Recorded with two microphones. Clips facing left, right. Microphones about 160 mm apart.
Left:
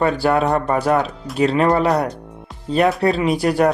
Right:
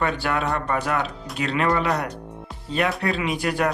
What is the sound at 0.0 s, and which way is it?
Speech, 35° left (ahead or behind).